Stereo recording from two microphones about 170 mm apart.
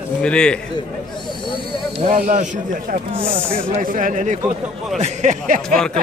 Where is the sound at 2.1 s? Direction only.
50° right (ahead or behind).